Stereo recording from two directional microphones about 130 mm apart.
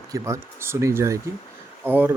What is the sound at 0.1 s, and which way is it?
Speech, 20° right (ahead or behind).